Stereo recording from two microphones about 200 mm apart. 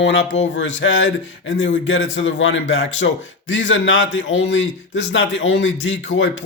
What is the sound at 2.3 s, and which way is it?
A man's voice, 65° left (ahead or behind).